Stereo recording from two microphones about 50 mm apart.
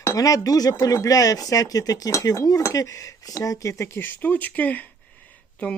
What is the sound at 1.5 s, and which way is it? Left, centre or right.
Speech, left.